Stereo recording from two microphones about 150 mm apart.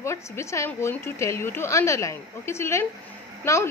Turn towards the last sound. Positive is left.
turn(degrees=15)  # may be behind; listen again after turning